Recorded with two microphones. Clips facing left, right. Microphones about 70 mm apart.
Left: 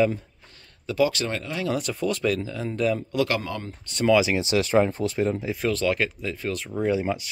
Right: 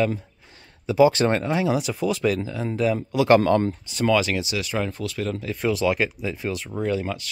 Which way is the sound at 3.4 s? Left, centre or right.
Right.